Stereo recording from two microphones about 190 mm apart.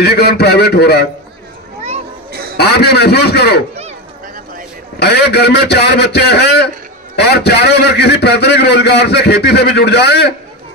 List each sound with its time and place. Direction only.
0.0 s a man's voice: 60° left (ahead or behind)
2.5 s a man's voice: 60° left (ahead or behind)
4.9 s a man's voice: 60° left (ahead or behind)